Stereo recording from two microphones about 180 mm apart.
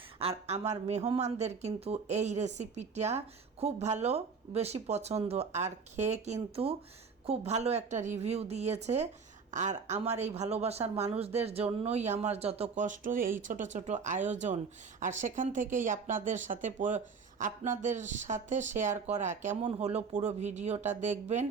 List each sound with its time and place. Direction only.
0.2 s speech: 35° right (ahead or behind)